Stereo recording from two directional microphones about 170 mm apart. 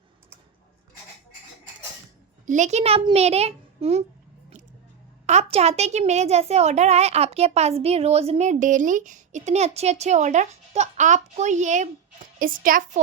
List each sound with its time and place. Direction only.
2.5 s a child's voice: 45° right (ahead or behind)
5.2 s a child's voice: 40° right (ahead or behind)